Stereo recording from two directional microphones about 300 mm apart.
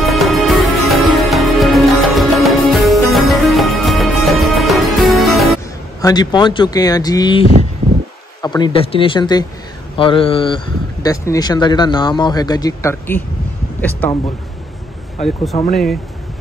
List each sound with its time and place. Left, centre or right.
0.0 s music: centre
5.9 s speech: centre
15.7 s speech: centre